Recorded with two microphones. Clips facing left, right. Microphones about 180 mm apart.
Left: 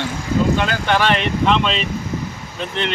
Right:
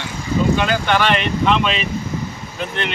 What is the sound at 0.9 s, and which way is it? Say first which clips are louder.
Speech: even; centre (ahead or behind).